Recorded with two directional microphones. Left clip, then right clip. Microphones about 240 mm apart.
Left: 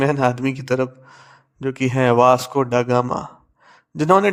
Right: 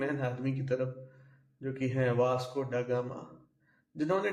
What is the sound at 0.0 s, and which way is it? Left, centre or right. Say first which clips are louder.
A man's voice: left 16 dB; left.